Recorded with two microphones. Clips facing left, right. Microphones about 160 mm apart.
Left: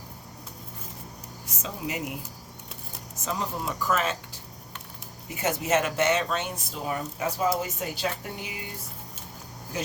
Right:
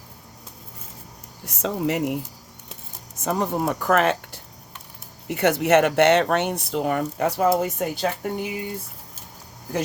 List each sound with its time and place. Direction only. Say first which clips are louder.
1.5 s speech: right 10 dB; 65° right (ahead or behind)
3.2 s speech: right 8 dB; 60° right (ahead or behind)